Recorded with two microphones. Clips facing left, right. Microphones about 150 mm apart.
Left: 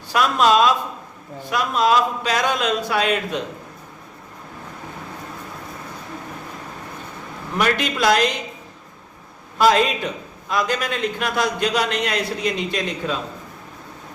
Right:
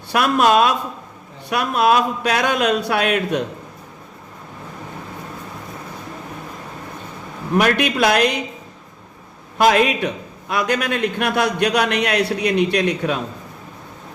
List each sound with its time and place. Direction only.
0.1 s a man's voice: 60° right (ahead or behind)
7.5 s a man's voice: 60° right (ahead or behind)
9.6 s a man's voice: 60° right (ahead or behind)